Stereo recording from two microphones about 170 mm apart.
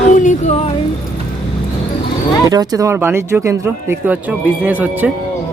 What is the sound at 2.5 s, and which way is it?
Speech, 25° right (ahead or behind).